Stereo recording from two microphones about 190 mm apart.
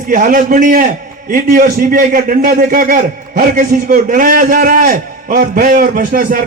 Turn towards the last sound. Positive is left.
turn(degrees=-45)  # may be behind; listen again after turning